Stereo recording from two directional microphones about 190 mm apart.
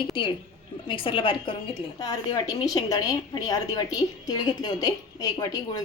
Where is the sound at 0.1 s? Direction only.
25° left (ahead or behind).